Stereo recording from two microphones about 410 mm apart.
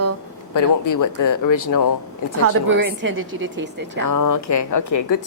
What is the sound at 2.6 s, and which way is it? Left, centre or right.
A woman's voice, right.